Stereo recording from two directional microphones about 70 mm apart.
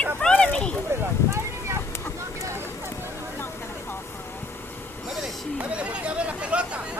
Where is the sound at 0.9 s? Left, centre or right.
Right.